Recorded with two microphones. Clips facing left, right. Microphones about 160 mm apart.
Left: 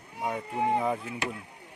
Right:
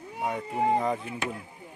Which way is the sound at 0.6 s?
Centre (ahead or behind).